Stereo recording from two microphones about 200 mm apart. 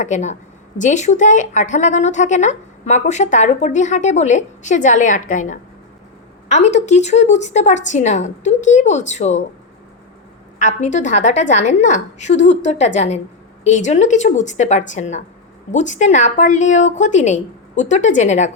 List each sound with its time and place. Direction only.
0.0 s speech: 35° left (ahead or behind)
10.6 s speech: 35° left (ahead or behind)